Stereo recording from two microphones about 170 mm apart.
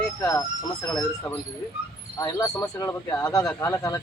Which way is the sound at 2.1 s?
20° left (ahead or behind).